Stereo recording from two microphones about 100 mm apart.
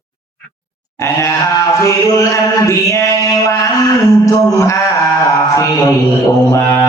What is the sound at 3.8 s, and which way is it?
Music, 35° left (ahead or behind).